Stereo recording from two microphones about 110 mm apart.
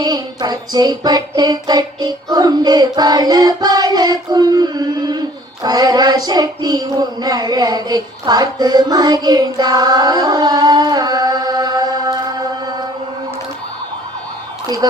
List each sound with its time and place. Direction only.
0.0 s music: 40° right (ahead or behind)